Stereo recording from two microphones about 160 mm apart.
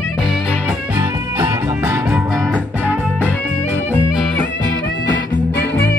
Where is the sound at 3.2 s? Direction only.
10° left (ahead or behind).